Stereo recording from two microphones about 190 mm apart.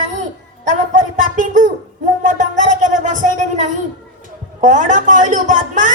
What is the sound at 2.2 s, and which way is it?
Music, 40° right (ahead or behind).